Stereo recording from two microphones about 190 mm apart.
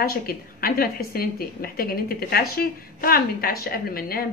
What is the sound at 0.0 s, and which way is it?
A woman's voice, 50° left (ahead or behind).